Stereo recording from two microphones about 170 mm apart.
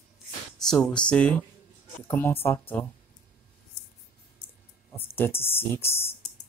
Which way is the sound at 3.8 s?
70° left (ahead or behind).